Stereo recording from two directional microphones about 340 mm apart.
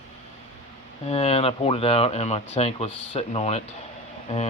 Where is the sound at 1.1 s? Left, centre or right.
Centre.